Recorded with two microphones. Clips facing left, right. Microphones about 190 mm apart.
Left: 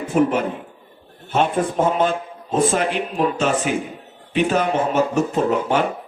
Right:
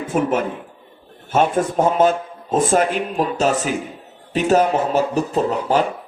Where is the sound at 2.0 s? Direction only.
45° right (ahead or behind).